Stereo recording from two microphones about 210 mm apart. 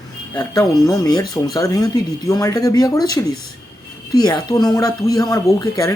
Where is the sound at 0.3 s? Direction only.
20° left (ahead or behind).